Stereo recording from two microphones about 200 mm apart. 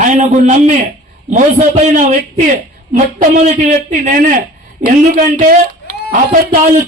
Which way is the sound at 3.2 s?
40° right (ahead or behind).